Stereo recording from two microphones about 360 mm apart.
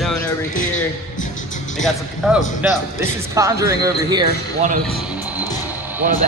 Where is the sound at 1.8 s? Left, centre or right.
Centre.